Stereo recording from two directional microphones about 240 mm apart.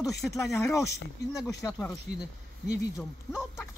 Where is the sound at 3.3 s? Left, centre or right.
Centre.